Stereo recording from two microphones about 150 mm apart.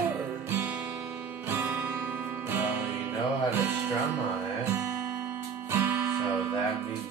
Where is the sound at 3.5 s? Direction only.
15° right (ahead or behind).